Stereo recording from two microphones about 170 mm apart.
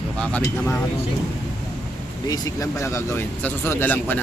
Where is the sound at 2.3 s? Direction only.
20° left (ahead or behind).